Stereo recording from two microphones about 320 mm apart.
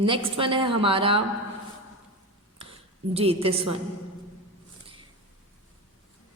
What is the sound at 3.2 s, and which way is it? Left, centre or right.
Speech, centre.